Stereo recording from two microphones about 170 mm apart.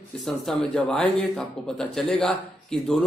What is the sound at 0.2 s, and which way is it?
Speech, 5° left (ahead or behind).